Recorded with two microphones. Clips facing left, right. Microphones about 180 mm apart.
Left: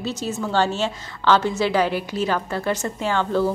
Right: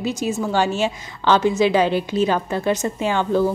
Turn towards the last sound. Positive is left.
turn(degrees=-15)  # may be behind; listen again after turning